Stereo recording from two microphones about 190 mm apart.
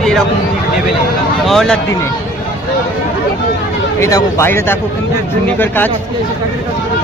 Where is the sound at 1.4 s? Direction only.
Centre (ahead or behind).